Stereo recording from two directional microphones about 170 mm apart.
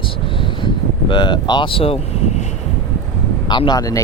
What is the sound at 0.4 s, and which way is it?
Vehicle, 30° left (ahead or behind).